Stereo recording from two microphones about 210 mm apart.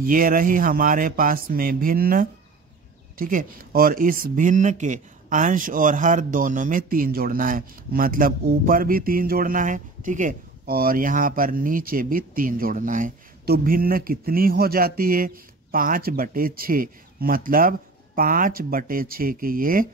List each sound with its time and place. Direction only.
0.0 s speech: 40° right (ahead or behind)